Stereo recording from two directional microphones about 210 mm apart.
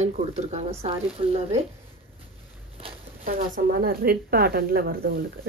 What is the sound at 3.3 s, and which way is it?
Speech, 40° right (ahead or behind).